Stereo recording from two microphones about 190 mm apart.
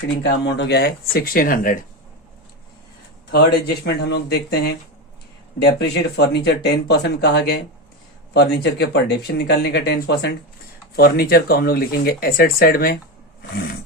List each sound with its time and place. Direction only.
0.2 s speech: 65° left (ahead or behind); by 1.8 s 50° left (ahead or behind)
3.8 s speech: 60° left (ahead or behind)